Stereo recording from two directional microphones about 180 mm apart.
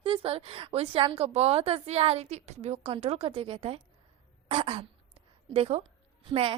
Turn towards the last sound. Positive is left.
turn(degrees=-30)  # may be behind; listen again after turning